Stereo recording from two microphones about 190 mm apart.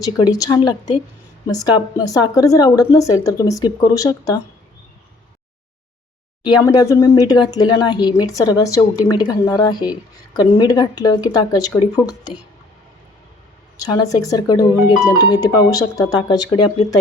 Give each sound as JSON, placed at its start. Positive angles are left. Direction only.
{"t": 0.0, "sound": "speech", "side_deg": 20}
{"t": 6.5, "sound": "speech", "side_deg": 20}
{"t": 13.8, "sound": "speech", "side_deg": 20}